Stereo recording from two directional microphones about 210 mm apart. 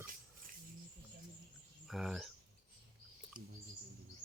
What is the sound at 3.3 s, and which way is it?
Bird, 40° right (ahead or behind).